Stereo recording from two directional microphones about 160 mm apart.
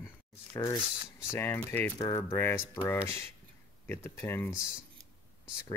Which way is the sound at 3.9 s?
15° left (ahead or behind).